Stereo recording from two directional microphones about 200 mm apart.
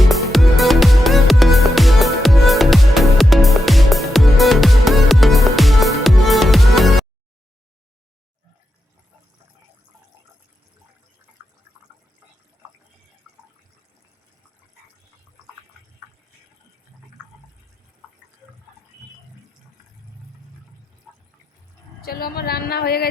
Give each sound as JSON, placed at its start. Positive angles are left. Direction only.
{"t": 0.1, "sound": "music", "side_deg": 0}
{"t": 13.2, "sound": "water", "side_deg": 0}
{"t": 21.1, "sound": "water", "side_deg": 0}
{"t": 22.0, "sound": "a sound", "side_deg": 50}